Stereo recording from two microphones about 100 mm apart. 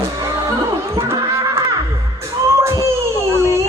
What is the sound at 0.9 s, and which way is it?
Music, 25° right (ahead or behind).